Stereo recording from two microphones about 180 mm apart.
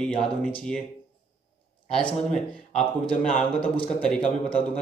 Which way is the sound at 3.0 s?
5° left (ahead or behind).